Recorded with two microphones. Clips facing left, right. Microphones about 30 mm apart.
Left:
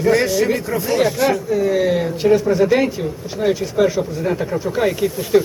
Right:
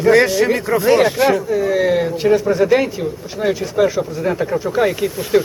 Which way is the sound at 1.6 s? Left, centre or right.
Centre.